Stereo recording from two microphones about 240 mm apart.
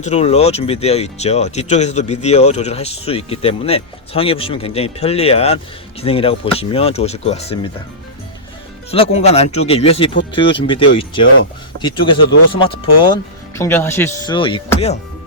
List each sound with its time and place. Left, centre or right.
0.0 s speech: left
8.9 s speech: left
13.6 s speech: centre
14.3 s speech: left